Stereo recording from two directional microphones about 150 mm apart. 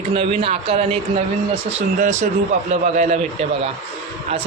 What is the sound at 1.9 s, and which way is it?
A man's voice, 55° right (ahead or behind).